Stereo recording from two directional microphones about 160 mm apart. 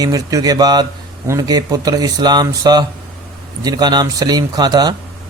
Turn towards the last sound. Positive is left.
turn(degrees=-25)  # may be behind; listen again after turning